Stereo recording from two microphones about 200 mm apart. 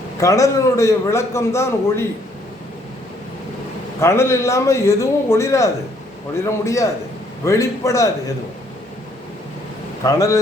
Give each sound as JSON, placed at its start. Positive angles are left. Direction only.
{"t": 0.2, "sound": "a man's voice", "side_deg": 15}
{"t": 4.0, "sound": "a man's voice", "side_deg": 15}
{"t": 10.0, "sound": "a man's voice", "side_deg": 15}